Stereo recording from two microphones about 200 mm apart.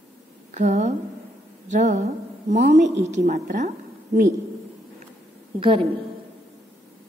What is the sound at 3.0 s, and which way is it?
Speech, 35° right (ahead or behind).